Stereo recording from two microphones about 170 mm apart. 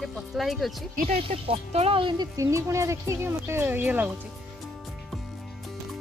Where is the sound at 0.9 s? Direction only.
40° right (ahead or behind); by 4.1 s 10° right (ahead or behind).